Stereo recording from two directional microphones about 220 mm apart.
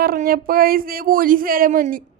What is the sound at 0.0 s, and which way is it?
A woman's voice, 40° right (ahead or behind).